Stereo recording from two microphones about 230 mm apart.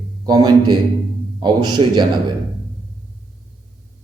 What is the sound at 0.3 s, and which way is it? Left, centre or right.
A man's voice, centre.